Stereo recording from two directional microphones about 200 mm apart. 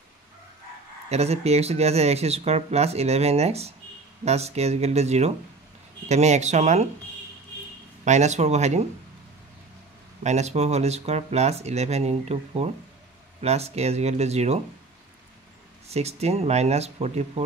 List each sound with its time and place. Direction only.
1.0 s speech: 30° right (ahead or behind)
8.0 s speech: 35° right (ahead or behind)
10.2 s speech: 35° right (ahead or behind)
15.9 s speech: 30° right (ahead or behind)